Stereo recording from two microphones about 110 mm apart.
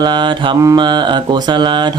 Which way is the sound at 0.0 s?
45° right (ahead or behind).